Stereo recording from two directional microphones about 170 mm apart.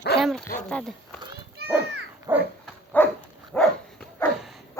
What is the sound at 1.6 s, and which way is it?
Children playing, 70° right (ahead or behind).